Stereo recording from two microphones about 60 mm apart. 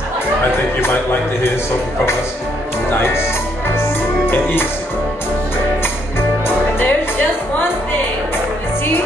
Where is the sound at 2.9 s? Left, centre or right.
Left.